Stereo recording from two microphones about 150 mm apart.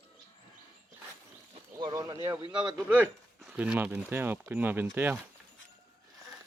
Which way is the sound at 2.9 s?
10° right (ahead or behind).